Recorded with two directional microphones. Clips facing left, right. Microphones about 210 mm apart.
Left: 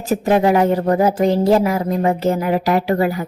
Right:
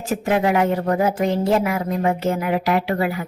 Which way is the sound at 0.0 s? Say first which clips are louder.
Left 4 dB; 35° left (ahead or behind).